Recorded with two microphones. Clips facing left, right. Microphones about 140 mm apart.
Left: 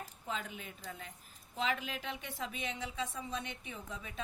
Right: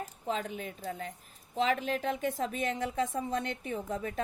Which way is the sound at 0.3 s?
45° right (ahead or behind).